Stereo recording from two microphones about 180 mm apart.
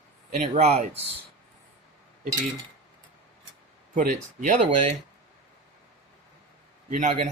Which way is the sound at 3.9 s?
45° right (ahead or behind).